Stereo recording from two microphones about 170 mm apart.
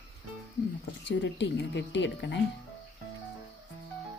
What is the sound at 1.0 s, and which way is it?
A woman's voice, 90° left.